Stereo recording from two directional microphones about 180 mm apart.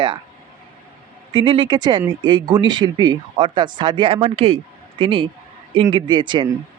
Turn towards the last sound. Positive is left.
turn(degrees=-25)  # may be behind; listen again after turning